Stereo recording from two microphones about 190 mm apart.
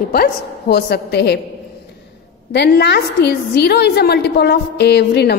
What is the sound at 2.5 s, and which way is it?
A woman's voice, 60° left (ahead or behind).